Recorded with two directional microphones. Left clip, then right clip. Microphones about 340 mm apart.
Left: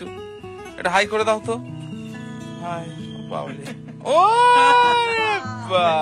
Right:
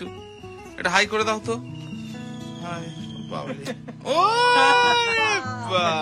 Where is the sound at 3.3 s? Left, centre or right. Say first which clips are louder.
Left 2 dB; centre.